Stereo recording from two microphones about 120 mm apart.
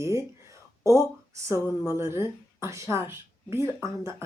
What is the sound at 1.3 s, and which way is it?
Speech, 25° right (ahead or behind).